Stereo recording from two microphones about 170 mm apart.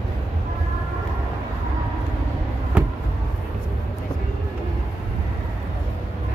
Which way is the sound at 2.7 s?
5° right (ahead or behind).